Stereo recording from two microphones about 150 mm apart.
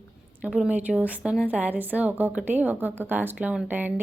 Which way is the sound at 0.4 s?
5° right (ahead or behind).